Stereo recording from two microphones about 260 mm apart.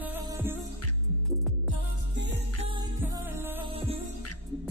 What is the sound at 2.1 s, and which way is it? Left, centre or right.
Music, right.